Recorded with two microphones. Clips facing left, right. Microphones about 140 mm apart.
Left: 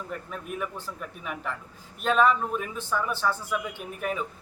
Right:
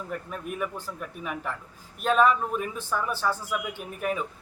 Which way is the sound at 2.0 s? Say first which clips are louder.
Right 1 dB; 5° right (ahead or behind).